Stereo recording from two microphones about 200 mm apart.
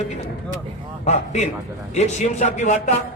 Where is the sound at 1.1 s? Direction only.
35° left (ahead or behind).